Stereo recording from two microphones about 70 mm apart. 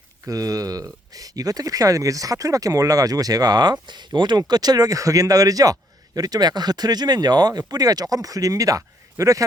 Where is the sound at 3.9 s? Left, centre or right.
Right.